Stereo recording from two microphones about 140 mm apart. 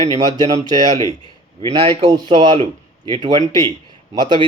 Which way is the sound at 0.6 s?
30° left (ahead or behind).